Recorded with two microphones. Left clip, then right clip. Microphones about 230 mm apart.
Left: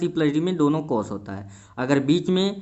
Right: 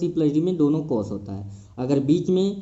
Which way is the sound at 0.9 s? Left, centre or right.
Left.